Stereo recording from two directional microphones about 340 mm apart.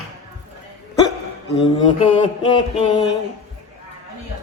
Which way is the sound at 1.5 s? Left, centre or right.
Centre.